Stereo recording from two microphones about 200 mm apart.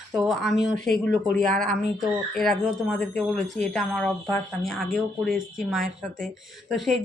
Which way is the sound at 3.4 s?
35° right (ahead or behind).